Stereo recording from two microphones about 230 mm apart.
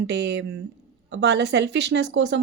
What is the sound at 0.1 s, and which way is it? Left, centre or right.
Speech, right.